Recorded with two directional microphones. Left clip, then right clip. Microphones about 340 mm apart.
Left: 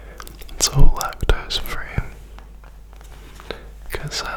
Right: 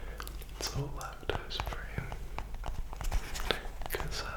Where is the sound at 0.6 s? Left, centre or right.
Left.